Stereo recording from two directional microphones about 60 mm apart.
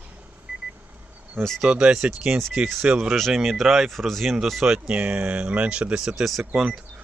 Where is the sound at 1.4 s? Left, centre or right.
Right.